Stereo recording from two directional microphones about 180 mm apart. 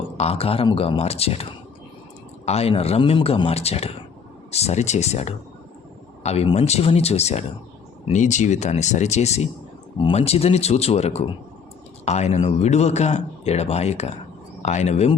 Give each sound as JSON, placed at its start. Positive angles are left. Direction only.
{"t": 0.2, "sound": "speech", "side_deg": 35}